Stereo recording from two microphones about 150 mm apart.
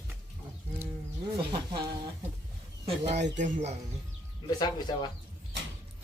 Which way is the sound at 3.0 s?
50° right (ahead or behind).